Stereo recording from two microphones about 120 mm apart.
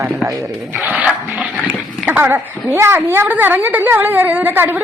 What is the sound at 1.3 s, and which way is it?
Dog, 5° right (ahead or behind).